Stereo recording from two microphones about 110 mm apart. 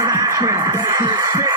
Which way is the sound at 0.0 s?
30° right (ahead or behind).